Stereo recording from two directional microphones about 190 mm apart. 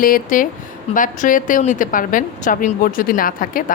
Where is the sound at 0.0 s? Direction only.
45° left (ahead or behind).